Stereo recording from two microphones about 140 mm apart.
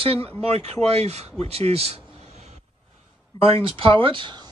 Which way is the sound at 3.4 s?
40° right (ahead or behind).